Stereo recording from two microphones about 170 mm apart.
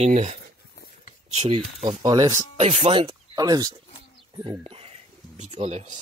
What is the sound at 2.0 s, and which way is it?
Speech, 25° right (ahead or behind).